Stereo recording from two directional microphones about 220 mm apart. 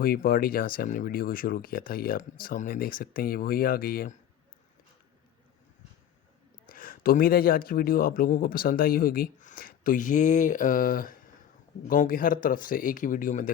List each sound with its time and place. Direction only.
0.0 s speech: 40° left (ahead or behind)
6.7 s speech: 40° left (ahead or behind)